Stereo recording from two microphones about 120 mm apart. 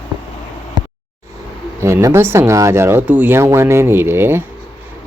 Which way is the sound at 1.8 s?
25° right (ahead or behind).